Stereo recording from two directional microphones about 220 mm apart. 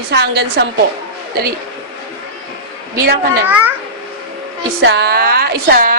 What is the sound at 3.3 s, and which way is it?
Speech, 10° right (ahead or behind).